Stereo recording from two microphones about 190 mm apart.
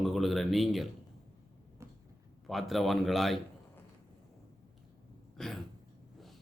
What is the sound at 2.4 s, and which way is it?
A man's voice, centre (ahead or behind).